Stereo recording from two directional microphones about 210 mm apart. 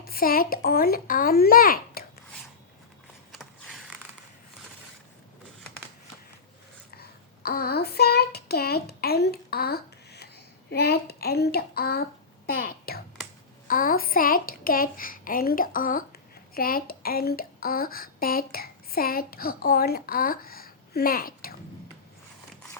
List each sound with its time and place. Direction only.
0.0 s a child's voice: 45° left (ahead or behind)
3.3 s mechanisms: centre (ahead or behind)
7.4 s child singing: 45° left (ahead or behind)
12.5 s a sound: 45° left (ahead or behind)
13.7 s a child's voice: 40° left (ahead or behind)